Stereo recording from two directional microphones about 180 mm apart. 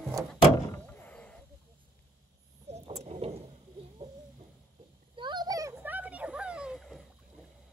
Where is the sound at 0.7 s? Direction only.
10° left (ahead or behind).